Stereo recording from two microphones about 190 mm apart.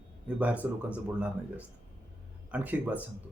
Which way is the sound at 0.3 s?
5° right (ahead or behind).